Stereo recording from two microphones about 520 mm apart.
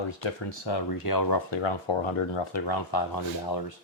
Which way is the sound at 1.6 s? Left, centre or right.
Left.